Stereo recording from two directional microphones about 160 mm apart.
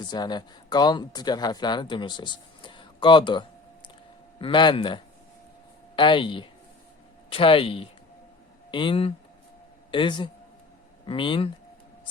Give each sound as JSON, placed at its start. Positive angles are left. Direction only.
{"t": 0.0, "sound": "a man's voice", "side_deg": 25}